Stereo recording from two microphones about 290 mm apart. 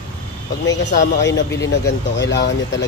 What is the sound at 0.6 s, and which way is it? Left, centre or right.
Mantra, left.